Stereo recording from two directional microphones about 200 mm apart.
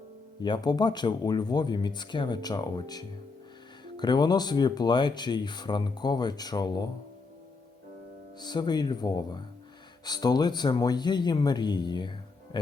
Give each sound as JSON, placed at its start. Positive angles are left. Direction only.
{"t": 0.4, "sound": "speech", "side_deg": 20}
{"t": 8.4, "sound": "speech", "side_deg": 20}